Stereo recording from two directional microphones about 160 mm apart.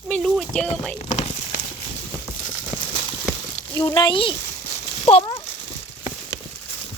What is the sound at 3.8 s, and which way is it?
Speech, 30° left (ahead or behind).